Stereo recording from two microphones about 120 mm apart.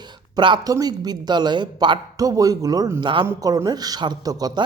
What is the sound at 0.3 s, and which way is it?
Speech, 40° right (ahead or behind).